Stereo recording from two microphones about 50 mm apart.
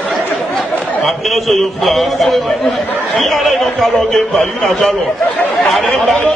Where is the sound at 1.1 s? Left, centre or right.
Centre.